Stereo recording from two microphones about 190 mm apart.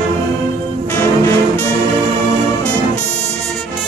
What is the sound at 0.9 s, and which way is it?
Music, 10° left (ahead or behind).